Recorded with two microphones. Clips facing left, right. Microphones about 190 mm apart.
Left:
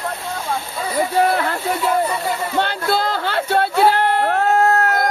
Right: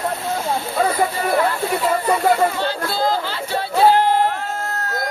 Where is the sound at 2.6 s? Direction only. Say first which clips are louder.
Left 1 dB; 65° left (ahead or behind).